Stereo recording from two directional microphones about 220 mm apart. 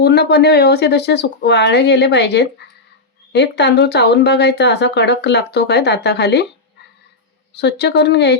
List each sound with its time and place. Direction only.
0.0 s speech: 50° left (ahead or behind)
7.6 s speech: 50° left (ahead or behind)